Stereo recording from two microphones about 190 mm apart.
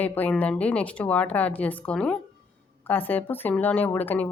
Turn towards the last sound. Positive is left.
turn(degrees=10)  # may be behind; listen again after turning